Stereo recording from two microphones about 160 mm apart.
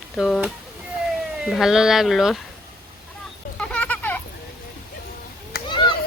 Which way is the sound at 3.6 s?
10° left (ahead or behind).